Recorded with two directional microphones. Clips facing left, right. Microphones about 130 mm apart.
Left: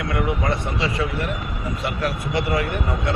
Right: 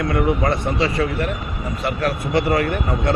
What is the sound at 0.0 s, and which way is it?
Speech, 40° right (ahead or behind).